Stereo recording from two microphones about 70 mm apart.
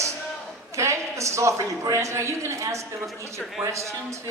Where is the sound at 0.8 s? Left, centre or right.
Right.